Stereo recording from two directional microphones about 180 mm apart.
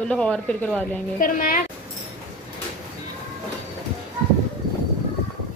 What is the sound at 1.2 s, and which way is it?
Speech, 50° left (ahead or behind).